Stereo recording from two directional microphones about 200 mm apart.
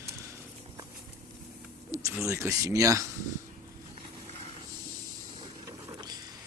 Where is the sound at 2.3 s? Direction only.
15° right (ahead or behind).